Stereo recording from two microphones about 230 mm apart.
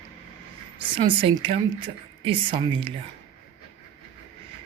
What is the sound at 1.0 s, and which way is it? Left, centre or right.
A man's voice, right.